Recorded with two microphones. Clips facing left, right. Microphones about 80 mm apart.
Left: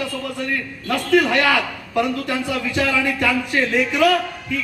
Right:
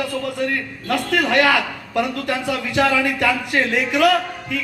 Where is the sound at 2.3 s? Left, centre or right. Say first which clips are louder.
Even; right.